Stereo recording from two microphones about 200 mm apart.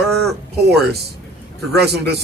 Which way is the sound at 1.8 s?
55° right (ahead or behind).